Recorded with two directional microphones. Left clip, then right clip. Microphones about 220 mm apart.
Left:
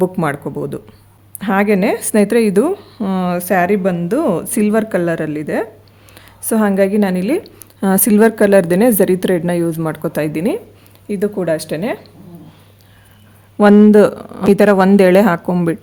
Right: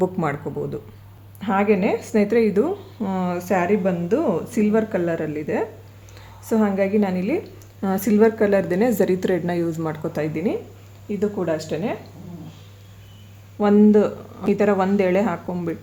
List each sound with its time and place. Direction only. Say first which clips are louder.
0.0 s speech: left 6 dB; 45° left (ahead or behind)
13.6 s speech: left 8 dB; 55° left (ahead or behind)